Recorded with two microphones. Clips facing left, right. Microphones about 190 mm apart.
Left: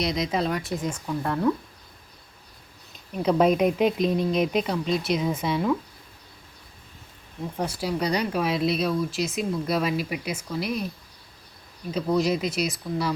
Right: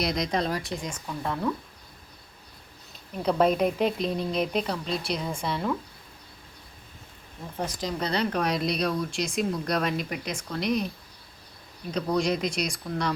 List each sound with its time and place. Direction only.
0.0 s speech: centre (ahead or behind)
3.2 s speech: 10° left (ahead or behind)
7.5 s speech: 10° left (ahead or behind)
11.9 s speech: 5° left (ahead or behind)